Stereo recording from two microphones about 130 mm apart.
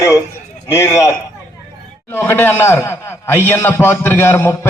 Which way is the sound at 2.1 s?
15° left (ahead or behind).